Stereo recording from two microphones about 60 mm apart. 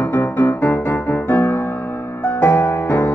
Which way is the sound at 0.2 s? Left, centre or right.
Left.